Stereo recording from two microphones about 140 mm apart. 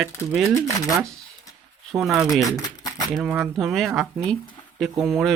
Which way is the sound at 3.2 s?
10° right (ahead or behind).